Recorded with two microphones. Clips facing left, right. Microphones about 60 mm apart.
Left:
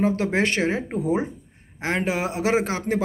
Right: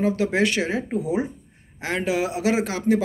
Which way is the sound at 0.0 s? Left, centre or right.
Left.